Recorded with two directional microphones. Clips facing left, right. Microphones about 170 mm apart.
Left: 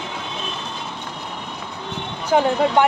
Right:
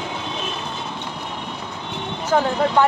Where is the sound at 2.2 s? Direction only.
20° left (ahead or behind).